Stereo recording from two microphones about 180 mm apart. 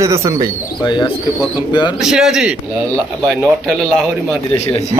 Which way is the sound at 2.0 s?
5° right (ahead or behind).